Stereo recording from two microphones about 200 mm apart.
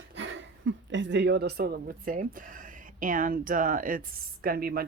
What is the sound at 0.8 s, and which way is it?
Speech, 65° right (ahead or behind).